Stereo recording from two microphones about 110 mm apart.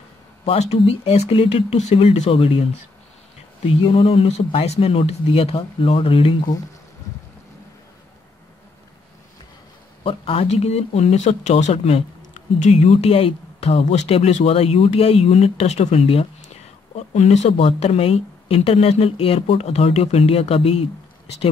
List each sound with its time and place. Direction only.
0.5 s speech: 75° left (ahead or behind)
2.3 s speech: 60° left (ahead or behind)
10.0 s speech: 55° left (ahead or behind)
12.5 s speech: 90° left; by 16.3 s 65° left (ahead or behind)
16.9 s speech: 90° left; by 20.8 s 65° left (ahead or behind)